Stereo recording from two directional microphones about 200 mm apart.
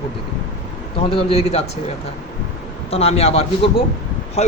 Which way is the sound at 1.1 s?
30° left (ahead or behind).